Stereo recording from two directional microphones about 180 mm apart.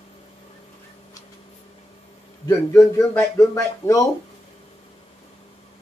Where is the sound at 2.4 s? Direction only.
15° left (ahead or behind).